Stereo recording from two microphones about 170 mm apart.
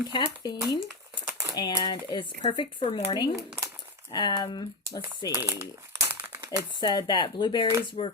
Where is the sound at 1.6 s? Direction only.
25° left (ahead or behind).